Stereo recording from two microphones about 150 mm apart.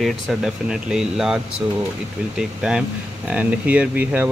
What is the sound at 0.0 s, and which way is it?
Speech, centre (ahead or behind).